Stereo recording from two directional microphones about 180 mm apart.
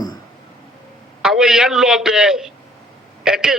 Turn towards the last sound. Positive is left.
turn(degrees=-5)  # may be behind; listen again after turning